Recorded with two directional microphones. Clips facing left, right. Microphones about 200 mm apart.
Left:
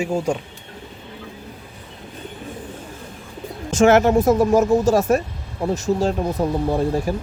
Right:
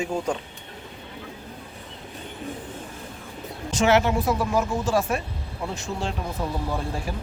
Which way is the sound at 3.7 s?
50° left (ahead or behind).